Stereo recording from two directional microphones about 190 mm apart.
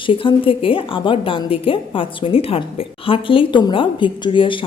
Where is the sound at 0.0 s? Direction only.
25° left (ahead or behind).